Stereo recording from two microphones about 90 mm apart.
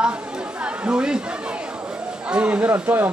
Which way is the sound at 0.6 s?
10° right (ahead or behind).